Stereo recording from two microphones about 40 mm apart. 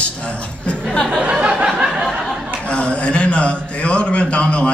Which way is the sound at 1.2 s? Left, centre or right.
Right.